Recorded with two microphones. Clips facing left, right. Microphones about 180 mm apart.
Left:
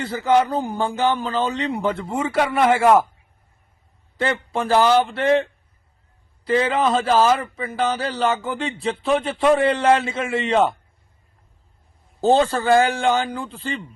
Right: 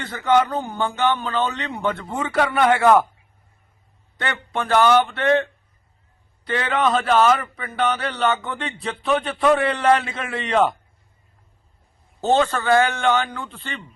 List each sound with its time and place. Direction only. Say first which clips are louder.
0.0 s speech: left 1 dB; 30° left (ahead or behind)
4.2 s a man's voice: left 4 dB; 30° left (ahead or behind)
12.2 s a man's voice: left 2 dB; 35° left (ahead or behind)